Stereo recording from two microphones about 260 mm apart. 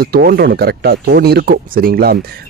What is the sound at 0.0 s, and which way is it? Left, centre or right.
Speech, right.